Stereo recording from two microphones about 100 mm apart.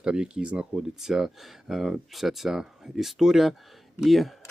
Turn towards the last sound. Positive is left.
turn(degrees=0)  # may be behind; listen again after turning